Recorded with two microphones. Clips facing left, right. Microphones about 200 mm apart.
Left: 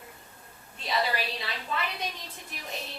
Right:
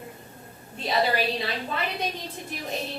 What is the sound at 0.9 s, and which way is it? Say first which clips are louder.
A woman's voice: right 5 dB; 40° right (ahead or behind).